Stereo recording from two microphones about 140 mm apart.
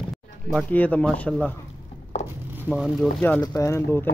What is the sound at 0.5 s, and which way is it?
Speech, 10° left (ahead or behind).